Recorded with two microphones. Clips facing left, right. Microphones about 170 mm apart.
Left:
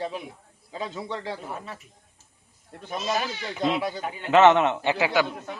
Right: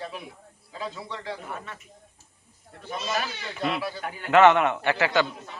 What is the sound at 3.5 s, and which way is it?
A man's voice, 20° left (ahead or behind).